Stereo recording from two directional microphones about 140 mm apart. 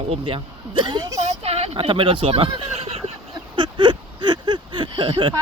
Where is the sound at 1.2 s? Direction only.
45° right (ahead or behind).